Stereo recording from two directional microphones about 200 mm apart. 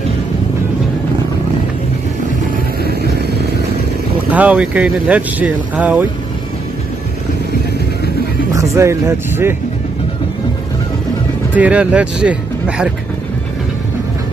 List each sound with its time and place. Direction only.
2.8 s vehicle: 50° right (ahead or behind)
4.3 s speech: 5° right (ahead or behind)
8.5 s speech: 15° right (ahead or behind)
11.5 s speech: 5° right (ahead or behind)